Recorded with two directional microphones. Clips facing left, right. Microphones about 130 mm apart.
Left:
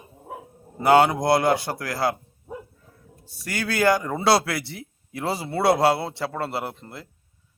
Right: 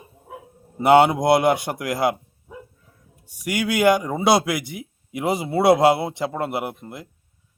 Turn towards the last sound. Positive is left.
turn(degrees=-15)  # may be behind; listen again after turning